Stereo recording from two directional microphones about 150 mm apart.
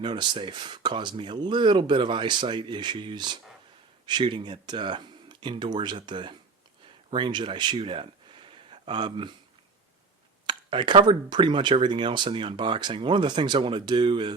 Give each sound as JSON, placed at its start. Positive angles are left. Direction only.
{"t": 0.0, "sound": "speech", "side_deg": -30}
{"t": 10.4, "sound": "speech", "side_deg": -30}